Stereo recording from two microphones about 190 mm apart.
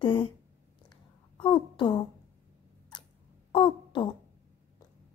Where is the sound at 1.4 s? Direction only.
25° left (ahead or behind).